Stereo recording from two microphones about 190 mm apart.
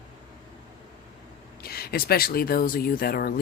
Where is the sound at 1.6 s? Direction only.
55° left (ahead or behind).